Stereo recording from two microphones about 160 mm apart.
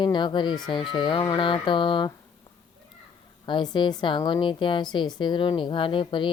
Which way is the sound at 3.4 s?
30° left (ahead or behind).